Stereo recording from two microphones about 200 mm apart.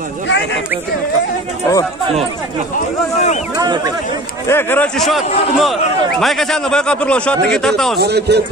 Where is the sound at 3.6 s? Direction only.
20° right (ahead or behind).